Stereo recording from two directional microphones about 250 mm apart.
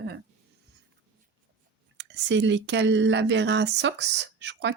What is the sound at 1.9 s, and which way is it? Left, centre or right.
Speech, right.